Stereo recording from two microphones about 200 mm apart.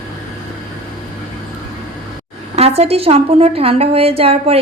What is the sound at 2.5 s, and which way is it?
A woman's voice, 30° right (ahead or behind).